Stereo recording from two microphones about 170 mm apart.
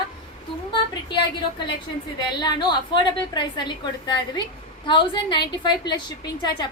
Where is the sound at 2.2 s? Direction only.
25° left (ahead or behind).